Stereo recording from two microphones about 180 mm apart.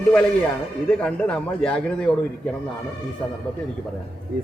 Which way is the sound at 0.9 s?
5° left (ahead or behind).